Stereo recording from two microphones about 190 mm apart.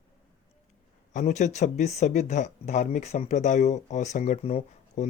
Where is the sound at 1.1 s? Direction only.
40° left (ahead or behind).